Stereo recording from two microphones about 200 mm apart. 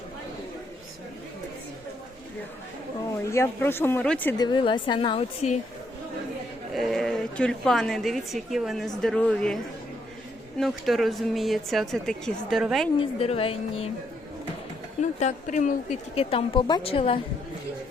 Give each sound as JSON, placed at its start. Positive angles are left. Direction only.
{"t": 3.2, "sound": "speech", "side_deg": 10}
{"t": 4.4, "sound": "a woman's voice", "side_deg": 20}
{"t": 6.7, "sound": "a woman's voice", "side_deg": 0}
{"t": 10.6, "sound": "a woman's voice", "side_deg": 0}
{"t": 13.0, "sound": "a woman's voice", "side_deg": 30}
{"t": 15.2, "sound": "a woman's voice", "side_deg": 35}